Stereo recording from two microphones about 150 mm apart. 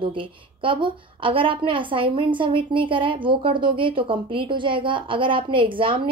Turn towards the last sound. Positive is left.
turn(degrees=-35)  # may be behind; listen again after turning